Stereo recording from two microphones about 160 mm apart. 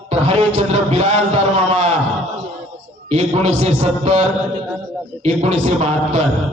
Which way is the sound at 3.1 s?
40° right (ahead or behind).